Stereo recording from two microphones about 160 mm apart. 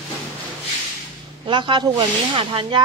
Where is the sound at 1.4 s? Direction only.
30° right (ahead or behind).